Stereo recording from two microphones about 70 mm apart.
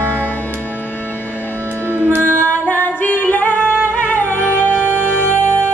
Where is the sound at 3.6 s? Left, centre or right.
Right.